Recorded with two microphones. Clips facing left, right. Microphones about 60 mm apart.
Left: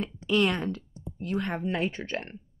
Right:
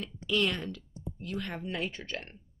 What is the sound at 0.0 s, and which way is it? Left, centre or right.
Speech, left.